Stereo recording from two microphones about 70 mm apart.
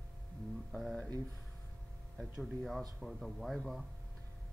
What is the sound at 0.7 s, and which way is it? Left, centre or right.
Speech, centre.